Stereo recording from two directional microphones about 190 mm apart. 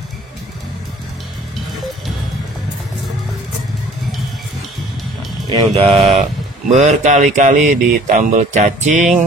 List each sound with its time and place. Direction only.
5.7 s speech: 30° right (ahead or behind)